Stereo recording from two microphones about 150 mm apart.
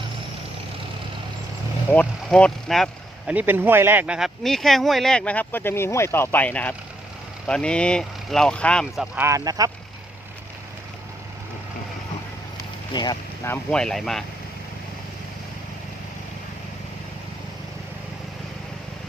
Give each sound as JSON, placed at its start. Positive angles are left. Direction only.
{"t": 1.9, "sound": "speech", "side_deg": 10}
{"t": 3.3, "sound": "speech", "side_deg": -15}
{"t": 9.1, "sound": "speech", "side_deg": -20}
{"t": 12.9, "sound": "speech", "side_deg": 30}
{"t": 13.5, "sound": "speech", "side_deg": 5}